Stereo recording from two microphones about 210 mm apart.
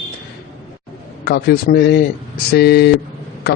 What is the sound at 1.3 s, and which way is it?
A man's voice, 50° left (ahead or behind).